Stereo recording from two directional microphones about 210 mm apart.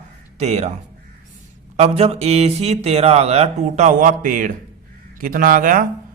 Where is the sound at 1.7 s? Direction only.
30° right (ahead or behind).